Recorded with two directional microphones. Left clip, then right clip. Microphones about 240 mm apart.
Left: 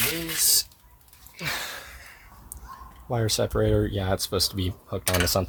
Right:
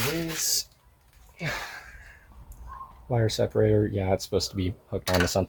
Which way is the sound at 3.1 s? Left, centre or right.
Left.